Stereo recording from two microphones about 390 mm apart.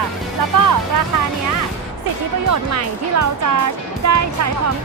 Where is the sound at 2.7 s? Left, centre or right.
Right.